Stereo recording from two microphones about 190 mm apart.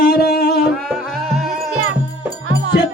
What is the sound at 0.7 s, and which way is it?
Music, 5° left (ahead or behind).